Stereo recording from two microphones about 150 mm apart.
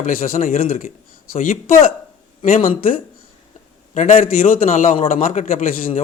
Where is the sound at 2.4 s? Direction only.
65° left (ahead or behind).